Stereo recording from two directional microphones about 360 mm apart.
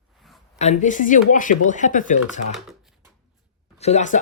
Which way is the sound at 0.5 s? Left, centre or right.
Centre.